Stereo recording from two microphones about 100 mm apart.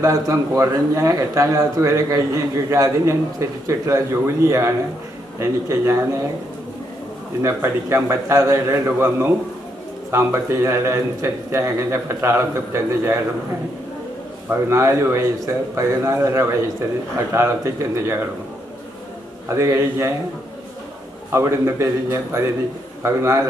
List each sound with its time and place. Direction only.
0.0 s a man's voice: 30° right (ahead or behind)
7.4 s a man's voice: 25° right (ahead or behind)
14.5 s a man's voice: 25° right (ahead or behind)
19.5 s a man's voice: 30° right (ahead or behind)
21.3 s a man's voice: 25° right (ahead or behind)